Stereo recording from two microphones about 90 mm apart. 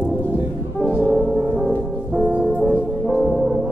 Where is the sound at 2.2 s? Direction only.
15° right (ahead or behind).